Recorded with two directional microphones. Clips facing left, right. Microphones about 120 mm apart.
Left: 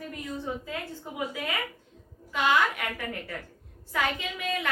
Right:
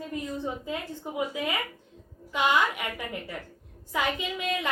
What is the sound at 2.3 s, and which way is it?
A woman's voice, 20° right (ahead or behind).